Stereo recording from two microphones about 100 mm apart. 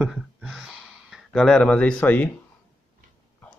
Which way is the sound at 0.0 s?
5° right (ahead or behind).